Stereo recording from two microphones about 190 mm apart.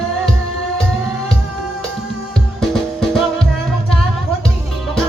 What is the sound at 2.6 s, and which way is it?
Music, centre (ahead or behind).